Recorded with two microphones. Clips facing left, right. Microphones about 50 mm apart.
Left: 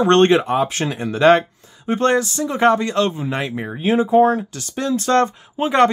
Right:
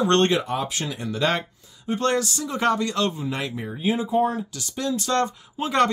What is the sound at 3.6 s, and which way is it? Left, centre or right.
Speech, left.